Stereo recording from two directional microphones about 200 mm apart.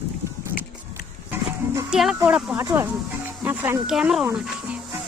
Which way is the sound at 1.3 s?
5° right (ahead or behind).